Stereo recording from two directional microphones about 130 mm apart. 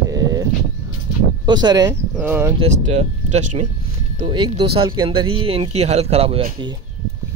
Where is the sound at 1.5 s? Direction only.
35° right (ahead or behind).